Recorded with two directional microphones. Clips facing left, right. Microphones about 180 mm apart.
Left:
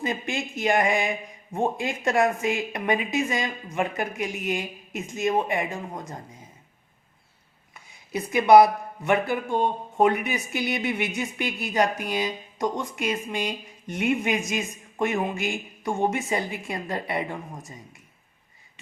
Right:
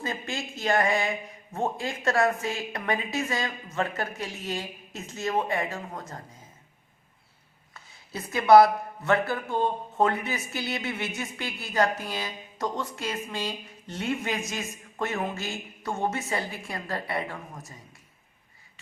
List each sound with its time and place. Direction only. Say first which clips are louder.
0.0 s speech: left 4 dB; 20° left (ahead or behind)
7.7 s speech: left 7 dB; 20° left (ahead or behind)